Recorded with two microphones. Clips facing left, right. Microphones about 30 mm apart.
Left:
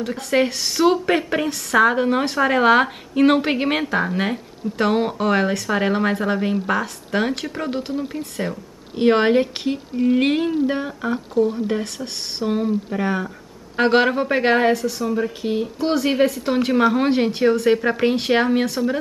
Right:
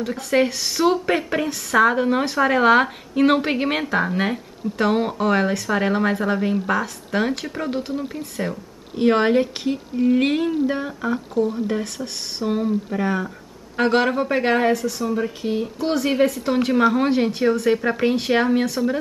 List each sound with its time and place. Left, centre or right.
0.0 s a woman's voice: centre
8.9 s a woman's voice: centre